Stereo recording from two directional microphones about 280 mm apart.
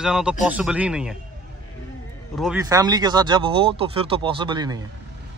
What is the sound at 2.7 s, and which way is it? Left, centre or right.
Speech, centre.